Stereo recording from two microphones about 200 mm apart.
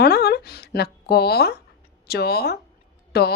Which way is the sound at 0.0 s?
50° left (ahead or behind).